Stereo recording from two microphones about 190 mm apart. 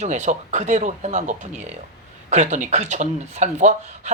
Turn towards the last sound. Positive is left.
turn(degrees=-40)  # may be behind; listen again after turning